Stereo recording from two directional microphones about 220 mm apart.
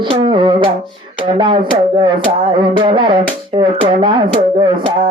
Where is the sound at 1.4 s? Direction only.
20° right (ahead or behind).